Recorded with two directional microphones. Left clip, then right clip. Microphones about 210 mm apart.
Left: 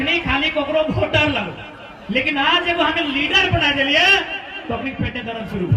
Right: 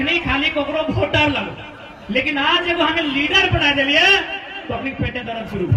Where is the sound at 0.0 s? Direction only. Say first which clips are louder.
Even; 30° left (ahead or behind).